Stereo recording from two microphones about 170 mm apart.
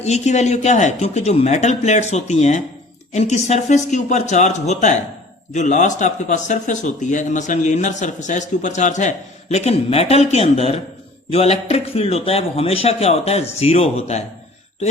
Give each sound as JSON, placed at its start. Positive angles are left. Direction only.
{"t": 0.0, "sound": "a man's voice", "side_deg": 40}